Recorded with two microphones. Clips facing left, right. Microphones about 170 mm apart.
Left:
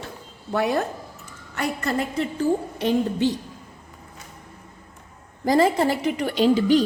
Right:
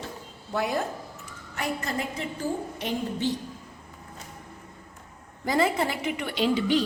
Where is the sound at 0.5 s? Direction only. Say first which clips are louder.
Left 5 dB; 70° left (ahead or behind).